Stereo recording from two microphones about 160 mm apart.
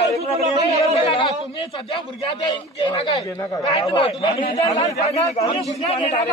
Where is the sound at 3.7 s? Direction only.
35° left (ahead or behind).